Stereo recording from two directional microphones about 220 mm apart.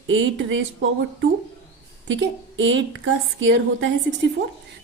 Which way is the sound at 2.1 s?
55° right (ahead or behind).